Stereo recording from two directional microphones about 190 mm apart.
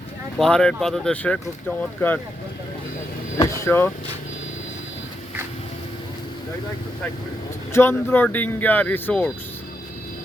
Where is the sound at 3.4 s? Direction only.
15° left (ahead or behind).